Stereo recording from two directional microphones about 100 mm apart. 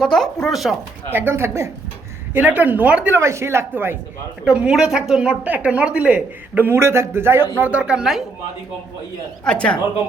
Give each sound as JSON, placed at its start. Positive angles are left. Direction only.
{"t": 0.0, "sound": "speech", "side_deg": 5}
{"t": 1.1, "sound": "speech", "side_deg": -25}
{"t": 2.3, "sound": "speech", "side_deg": -15}
{"t": 3.2, "sound": "speech", "side_deg": -25}
{"t": 4.4, "sound": "speech", "side_deg": -10}
{"t": 9.4, "sound": "a woman's voice", "side_deg": 10}